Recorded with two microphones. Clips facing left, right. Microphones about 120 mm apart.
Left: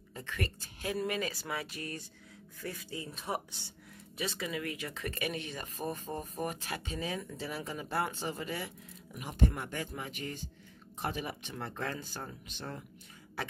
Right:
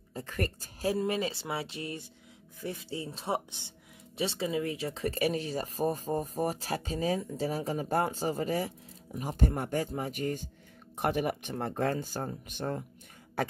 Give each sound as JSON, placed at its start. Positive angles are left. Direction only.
{"t": 0.1, "sound": "speech", "side_deg": -40}
{"t": 0.9, "sound": "speech", "side_deg": -30}
{"t": 11.0, "sound": "speech", "side_deg": -55}
{"t": 13.4, "sound": "a sound", "side_deg": -45}